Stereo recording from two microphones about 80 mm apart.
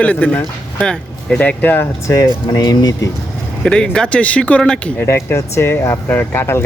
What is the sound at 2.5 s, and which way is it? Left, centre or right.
Speech, left.